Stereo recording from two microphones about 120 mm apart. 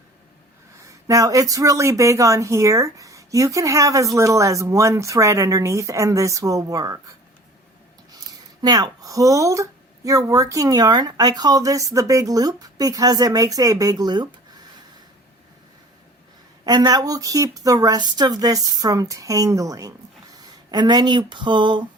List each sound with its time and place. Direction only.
0.9 s speech: 25° right (ahead or behind)
8.6 s a woman's voice: 30° right (ahead or behind)
16.6 s a woman's voice: 35° right (ahead or behind)